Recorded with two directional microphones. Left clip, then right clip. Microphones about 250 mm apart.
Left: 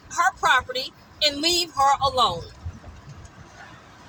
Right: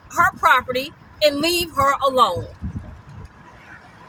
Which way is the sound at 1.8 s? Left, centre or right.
Centre.